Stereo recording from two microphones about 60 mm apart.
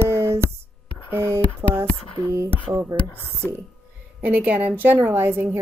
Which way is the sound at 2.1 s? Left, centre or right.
Right.